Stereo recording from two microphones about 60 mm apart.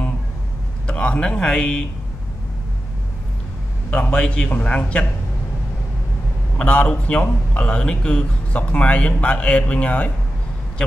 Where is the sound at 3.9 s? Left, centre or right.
Left.